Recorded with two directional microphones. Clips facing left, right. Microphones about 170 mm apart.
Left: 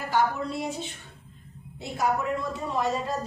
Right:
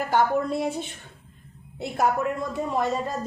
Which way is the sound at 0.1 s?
50° right (ahead or behind).